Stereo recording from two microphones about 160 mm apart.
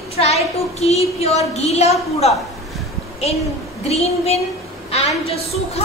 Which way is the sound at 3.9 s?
40° left (ahead or behind).